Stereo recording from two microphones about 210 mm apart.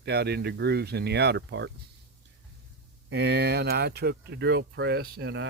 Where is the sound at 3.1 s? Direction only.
55° right (ahead or behind).